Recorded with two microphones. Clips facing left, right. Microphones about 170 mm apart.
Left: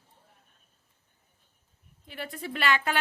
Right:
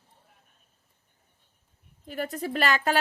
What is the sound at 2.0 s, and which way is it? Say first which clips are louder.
Speech: right 6 dB; 45° right (ahead or behind).